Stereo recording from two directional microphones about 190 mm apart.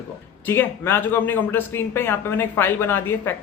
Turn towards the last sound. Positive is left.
turn(degrees=10)  # may be behind; listen again after turning